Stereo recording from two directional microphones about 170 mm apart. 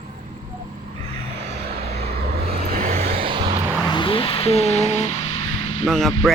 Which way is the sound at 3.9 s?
30° left (ahead or behind).